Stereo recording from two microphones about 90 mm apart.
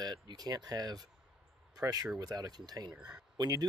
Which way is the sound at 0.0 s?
50° right (ahead or behind).